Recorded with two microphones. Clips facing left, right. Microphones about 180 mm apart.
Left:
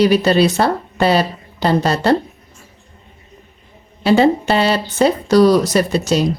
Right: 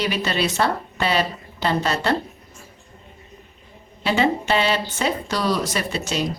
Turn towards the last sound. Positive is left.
turn(degrees=40)  # may be behind; listen again after turning